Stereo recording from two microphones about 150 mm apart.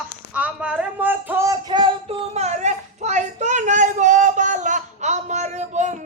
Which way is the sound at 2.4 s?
50° right (ahead or behind).